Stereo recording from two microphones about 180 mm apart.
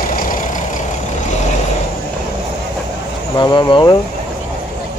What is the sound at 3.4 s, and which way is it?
Speech, 25° left (ahead or behind).